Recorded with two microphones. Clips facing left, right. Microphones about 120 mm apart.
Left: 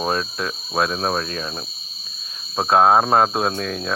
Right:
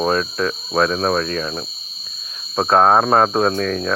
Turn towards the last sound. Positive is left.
turn(degrees=20)  # may be behind; listen again after turning